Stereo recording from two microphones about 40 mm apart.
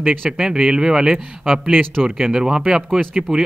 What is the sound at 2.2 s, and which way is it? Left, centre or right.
Speech, centre.